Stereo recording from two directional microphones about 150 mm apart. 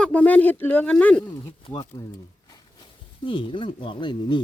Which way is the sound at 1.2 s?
25° left (ahead or behind).